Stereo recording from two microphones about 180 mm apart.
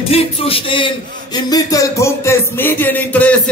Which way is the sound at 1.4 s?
20° left (ahead or behind).